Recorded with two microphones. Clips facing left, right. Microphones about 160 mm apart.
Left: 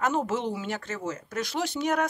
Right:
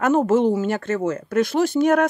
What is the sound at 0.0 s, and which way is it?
Speech, 50° right (ahead or behind).